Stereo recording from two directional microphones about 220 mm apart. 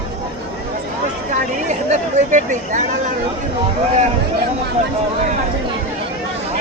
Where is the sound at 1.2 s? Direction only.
35° right (ahead or behind).